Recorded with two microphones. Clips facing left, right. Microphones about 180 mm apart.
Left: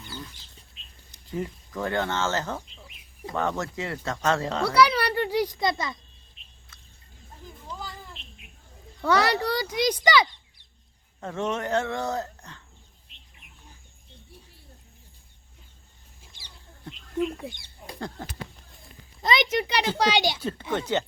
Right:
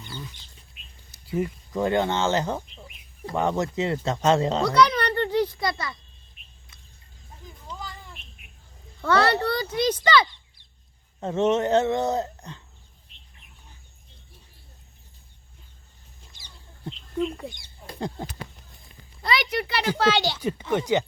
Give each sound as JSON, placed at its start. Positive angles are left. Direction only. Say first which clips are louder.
{"t": 0.0, "sound": "bird", "louder": "right 1 dB", "side_deg": 0}
{"t": 1.1, "sound": "speech", "louder": "right 5 dB", "side_deg": -10}
{"t": 4.6, "sound": "music", "louder": "right 1 dB", "side_deg": 10}
{"t": 7.7, "sound": "a sound", "louder": "even", "side_deg": -20}
{"t": 8.2, "sound": "a sound", "louder": "left 2 dB", "side_deg": 25}
{"t": 9.0, "sound": "a child's voice", "louder": "right 2 dB", "side_deg": 10}
{"t": 11.2, "sound": "speech", "louder": "right 7 dB", "side_deg": -20}
{"t": 16.2, "sound": "chicken", "louder": "even", "side_deg": 5}
{"t": 17.4, "sound": "speech", "louder": "right 1 dB", "side_deg": 0}
{"t": 18.2, "sound": "speech", "louder": "right 3 dB", "side_deg": -15}
{"t": 19.2, "sound": "a child's voice", "louder": "left 2 dB", "side_deg": 20}
{"t": 20.4, "sound": "speech", "louder": "right 4 dB", "side_deg": -15}